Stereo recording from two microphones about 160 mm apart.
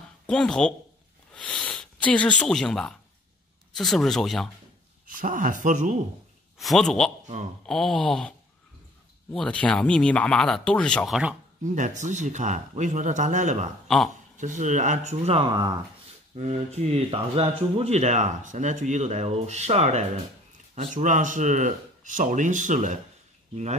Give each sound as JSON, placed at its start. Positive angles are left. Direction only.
{"t": 0.3, "sound": "speech", "side_deg": 5}
{"t": 1.3, "sound": "a sound", "side_deg": 5}
{"t": 3.7, "sound": "speech", "side_deg": 0}
{"t": 5.0, "sound": "speech", "side_deg": -55}
{"t": 6.6, "sound": "speech", "side_deg": 0}
{"t": 11.6, "sound": "speech", "side_deg": -50}
{"t": 13.8, "sound": "a man's voice", "side_deg": 0}
{"t": 14.3, "sound": "speech", "side_deg": -50}
{"t": 16.3, "sound": "speech", "side_deg": -45}